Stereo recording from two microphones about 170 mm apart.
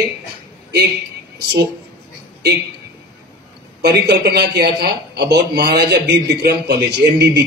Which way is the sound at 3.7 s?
75° right (ahead or behind).